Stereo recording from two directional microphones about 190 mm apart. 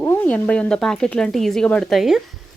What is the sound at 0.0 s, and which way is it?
Speech, 10° left (ahead or behind).